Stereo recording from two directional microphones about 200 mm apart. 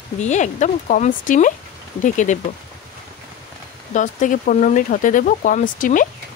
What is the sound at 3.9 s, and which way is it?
Speech, 40° left (ahead or behind).